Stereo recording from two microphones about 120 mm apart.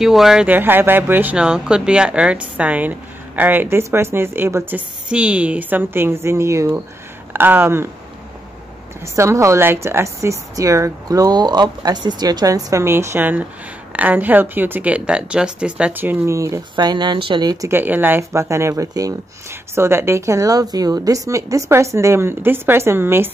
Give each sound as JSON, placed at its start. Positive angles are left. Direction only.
{"t": 0.0, "sound": "speech", "side_deg": -5}
{"t": 0.5, "sound": "a woman's voice", "side_deg": -15}
{"t": 9.0, "sound": "a woman's voice", "side_deg": -25}
{"t": 16.7, "sound": "speech", "side_deg": -40}
{"t": 17.6, "sound": "a woman's voice", "side_deg": -15}